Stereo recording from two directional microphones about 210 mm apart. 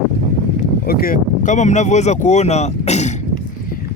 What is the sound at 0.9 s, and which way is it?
Speech, 45° left (ahead or behind).